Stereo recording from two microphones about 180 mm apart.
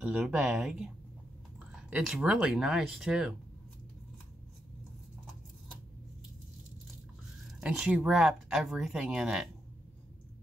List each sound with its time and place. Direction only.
0.0 s speech: 5° right (ahead or behind)
7.3 s speech: centre (ahead or behind)